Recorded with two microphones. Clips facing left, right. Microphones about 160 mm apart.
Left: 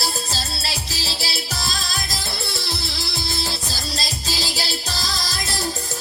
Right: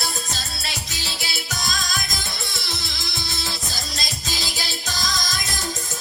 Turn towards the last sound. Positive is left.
turn(degrees=30)  # may be behind; listen again after turning